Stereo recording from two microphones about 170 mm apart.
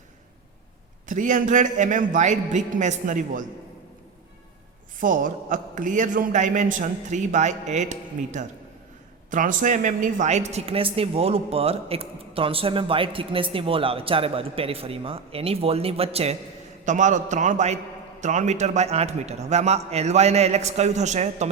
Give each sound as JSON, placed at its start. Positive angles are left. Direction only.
{"t": 1.0, "sound": "a man's voice", "side_deg": -50}
{"t": 4.9, "sound": "a man's voice", "side_deg": -50}